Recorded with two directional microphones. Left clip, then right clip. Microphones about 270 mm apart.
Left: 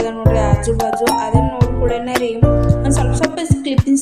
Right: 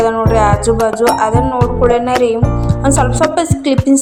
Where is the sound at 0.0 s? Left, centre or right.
Centre.